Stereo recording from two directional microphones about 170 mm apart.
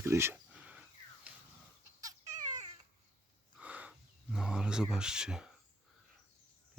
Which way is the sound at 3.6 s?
10° right (ahead or behind).